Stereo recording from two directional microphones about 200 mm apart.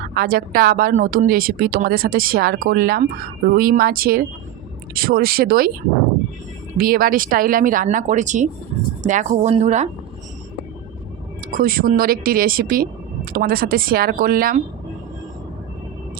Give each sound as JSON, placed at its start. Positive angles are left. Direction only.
{"t": 0.1, "sound": "speech", "side_deg": -45}
{"t": 6.7, "sound": "speech", "side_deg": -45}
{"t": 11.5, "sound": "speech", "side_deg": -45}